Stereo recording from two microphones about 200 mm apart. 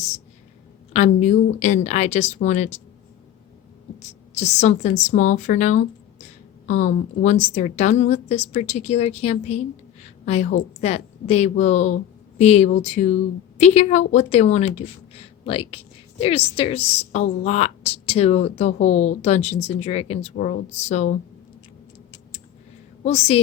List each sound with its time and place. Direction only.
0.9 s a woman's voice: 35° left (ahead or behind)
4.4 s a woman's voice: 35° left (ahead or behind)
10.8 s a woman's voice: 30° left (ahead or behind)
23.0 s a woman's voice: 35° left (ahead or behind)